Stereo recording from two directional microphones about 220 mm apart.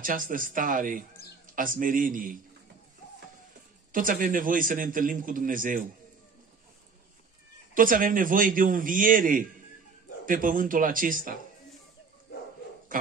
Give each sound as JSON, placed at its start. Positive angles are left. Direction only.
{"t": 0.0, "sound": "a man's voice", "side_deg": -40}
{"t": 3.9, "sound": "a man's voice", "side_deg": -40}
{"t": 7.7, "sound": "a man's voice", "side_deg": -40}
{"t": 12.9, "sound": "a sound", "side_deg": -40}